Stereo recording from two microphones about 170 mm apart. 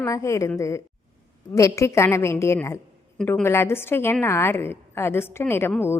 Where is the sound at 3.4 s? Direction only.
15° left (ahead or behind).